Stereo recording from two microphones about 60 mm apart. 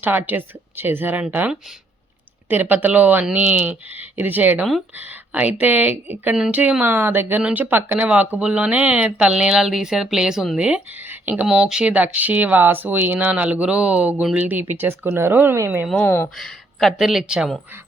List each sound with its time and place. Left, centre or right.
0.0 s speech: right
2.5 s speech: right
6.8 s speech: right; by 10.8 s centre
11.1 s a sound: right
11.4 s speech: centre; by 15.5 s right
16.0 s speech: left
16.4 s speech: centre